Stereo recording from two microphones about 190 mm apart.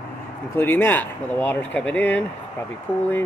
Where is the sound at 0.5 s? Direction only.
10° left (ahead or behind).